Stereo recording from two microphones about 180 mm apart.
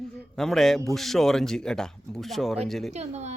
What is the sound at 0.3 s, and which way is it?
Speech, centre (ahead or behind).